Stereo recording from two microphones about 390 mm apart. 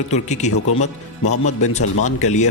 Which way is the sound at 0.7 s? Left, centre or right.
Left.